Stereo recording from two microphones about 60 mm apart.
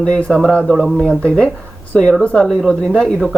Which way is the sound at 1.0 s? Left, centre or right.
Centre.